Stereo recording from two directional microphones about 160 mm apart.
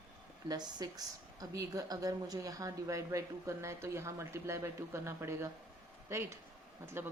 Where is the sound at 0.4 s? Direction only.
25° right (ahead or behind).